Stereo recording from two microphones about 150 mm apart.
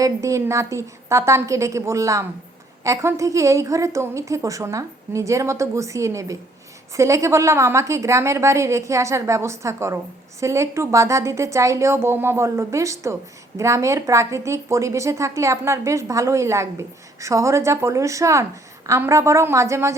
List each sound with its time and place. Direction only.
0.0 s a woman's voice: 20° right (ahead or behind)